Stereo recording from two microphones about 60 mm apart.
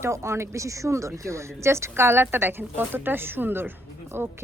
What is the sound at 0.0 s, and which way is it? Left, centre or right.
A woman's voice, right.